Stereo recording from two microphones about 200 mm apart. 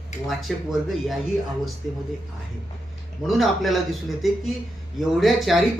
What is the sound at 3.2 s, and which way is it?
Speech, centre (ahead or behind).